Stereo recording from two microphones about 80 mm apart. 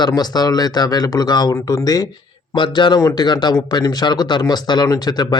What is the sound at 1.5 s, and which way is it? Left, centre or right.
Speech, left.